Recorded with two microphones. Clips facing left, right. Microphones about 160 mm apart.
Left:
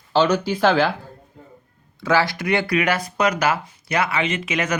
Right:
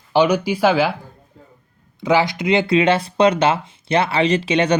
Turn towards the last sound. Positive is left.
turn(degrees=-30)  # may be behind; listen again after turning